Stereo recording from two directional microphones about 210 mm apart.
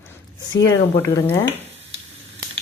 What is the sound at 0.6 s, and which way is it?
Speech, 15° left (ahead or behind).